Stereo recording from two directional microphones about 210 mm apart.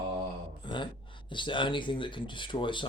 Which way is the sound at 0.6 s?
25° left (ahead or behind).